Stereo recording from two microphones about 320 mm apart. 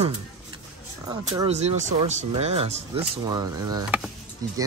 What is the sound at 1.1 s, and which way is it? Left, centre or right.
Speech, centre.